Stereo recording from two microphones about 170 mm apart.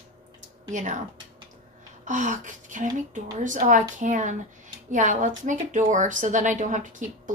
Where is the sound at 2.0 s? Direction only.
50° right (ahead or behind).